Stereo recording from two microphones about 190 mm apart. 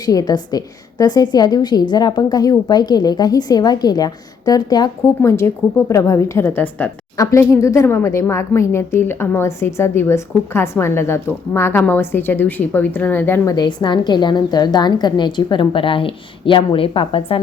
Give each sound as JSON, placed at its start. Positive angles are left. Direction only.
{"t": 0.0, "sound": "a woman's voice", "side_deg": 20}